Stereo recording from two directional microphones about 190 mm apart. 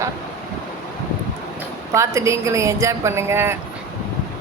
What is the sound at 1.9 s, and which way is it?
Speech, 15° right (ahead or behind).